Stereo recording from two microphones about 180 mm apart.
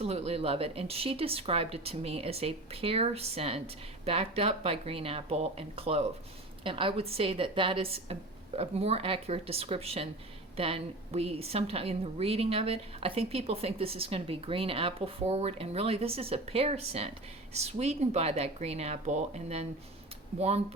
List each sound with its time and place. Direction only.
0.0 s a woman's voice: 35° right (ahead or behind)